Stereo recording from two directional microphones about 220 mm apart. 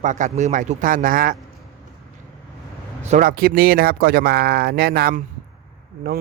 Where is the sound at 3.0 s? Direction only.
35° right (ahead or behind).